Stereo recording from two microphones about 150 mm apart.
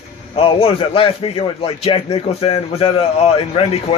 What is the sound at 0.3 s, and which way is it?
A man's voice, 35° left (ahead or behind).